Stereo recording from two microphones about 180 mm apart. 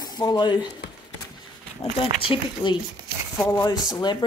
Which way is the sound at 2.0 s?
30° left (ahead or behind).